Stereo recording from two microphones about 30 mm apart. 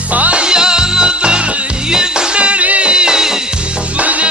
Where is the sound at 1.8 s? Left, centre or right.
Right.